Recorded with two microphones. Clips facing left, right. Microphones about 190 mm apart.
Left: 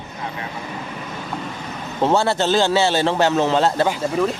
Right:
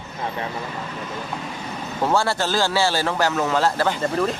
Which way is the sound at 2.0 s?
20° left (ahead or behind).